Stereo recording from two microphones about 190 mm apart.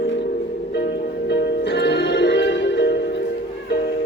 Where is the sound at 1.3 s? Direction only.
60° left (ahead or behind).